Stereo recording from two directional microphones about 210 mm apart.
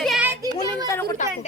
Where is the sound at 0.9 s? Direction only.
15° left (ahead or behind).